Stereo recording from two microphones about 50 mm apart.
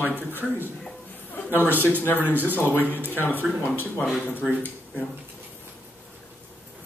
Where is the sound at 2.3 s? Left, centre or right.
Right.